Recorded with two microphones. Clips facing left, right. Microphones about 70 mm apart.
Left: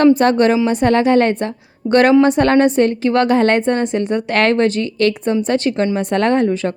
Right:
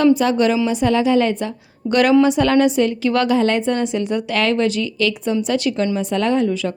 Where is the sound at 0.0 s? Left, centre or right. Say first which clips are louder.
Left 3 dB; left.